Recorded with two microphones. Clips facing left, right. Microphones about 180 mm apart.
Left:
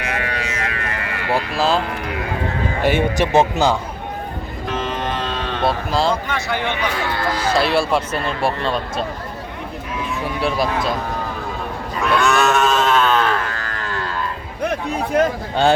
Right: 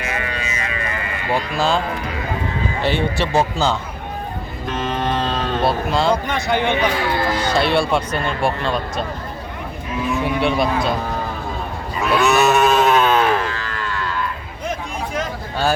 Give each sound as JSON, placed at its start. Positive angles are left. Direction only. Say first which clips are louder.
{"t": 0.0, "sound": "a sound", "louder": "left 1 dB", "side_deg": 65}
{"t": 1.3, "sound": "speech", "louder": "left 1 dB", "side_deg": 5}
{"t": 2.8, "sound": "a man's voice", "louder": "left 3 dB", "side_deg": 15}
{"t": 5.6, "sound": "speech", "louder": "even", "side_deg": 0}
{"t": 6.2, "sound": "speech", "louder": "right 3 dB", "side_deg": -20}
{"t": 7.5, "sound": "speech", "louder": "left 1 dB", "side_deg": 0}
{"t": 10.2, "sound": "speech", "louder": "right 1 dB", "side_deg": 0}
{"t": 11.9, "sound": "sheep", "louder": "right 1 dB", "side_deg": -5}
{"t": 14.6, "sound": "a sound", "louder": "left 5 dB", "side_deg": 65}